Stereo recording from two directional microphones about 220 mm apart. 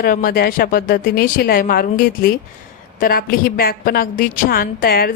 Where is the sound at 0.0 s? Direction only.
40° left (ahead or behind).